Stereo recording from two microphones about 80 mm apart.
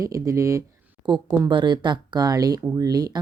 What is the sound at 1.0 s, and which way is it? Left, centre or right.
Speech, right.